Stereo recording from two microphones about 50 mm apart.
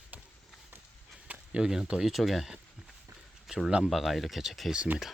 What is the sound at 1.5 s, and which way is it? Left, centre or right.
Speech, centre.